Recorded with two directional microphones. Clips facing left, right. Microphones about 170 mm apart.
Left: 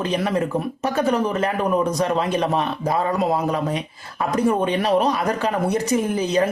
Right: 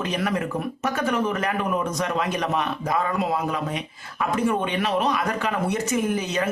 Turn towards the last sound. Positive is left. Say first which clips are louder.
# left 4 dB
turn(degrees=35)  # may be behind; listen again after turning